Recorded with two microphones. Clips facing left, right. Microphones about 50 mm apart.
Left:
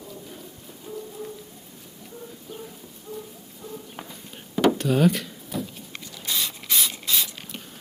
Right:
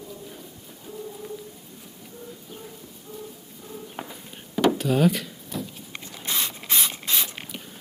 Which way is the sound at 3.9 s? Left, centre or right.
Centre.